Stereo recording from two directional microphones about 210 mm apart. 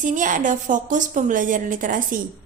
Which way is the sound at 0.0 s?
40° right (ahead or behind).